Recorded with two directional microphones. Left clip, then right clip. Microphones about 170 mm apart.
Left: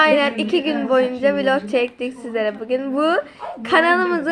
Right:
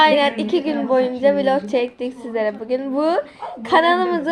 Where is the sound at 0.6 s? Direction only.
10° left (ahead or behind).